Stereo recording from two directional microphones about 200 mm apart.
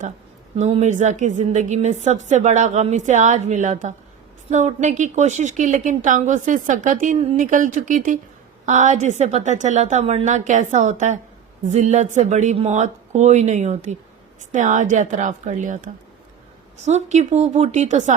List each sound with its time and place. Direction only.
0.5 s a woman's voice: 30° right (ahead or behind)